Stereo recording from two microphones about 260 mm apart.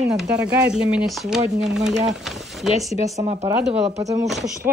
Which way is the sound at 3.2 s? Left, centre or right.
Right.